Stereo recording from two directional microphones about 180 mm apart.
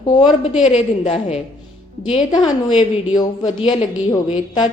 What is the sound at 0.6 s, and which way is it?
A woman's voice, 35° left (ahead or behind).